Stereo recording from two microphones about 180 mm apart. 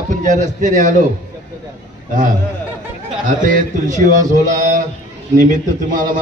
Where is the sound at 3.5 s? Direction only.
45° right (ahead or behind).